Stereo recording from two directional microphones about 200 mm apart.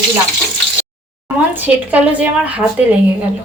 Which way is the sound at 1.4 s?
10° right (ahead or behind).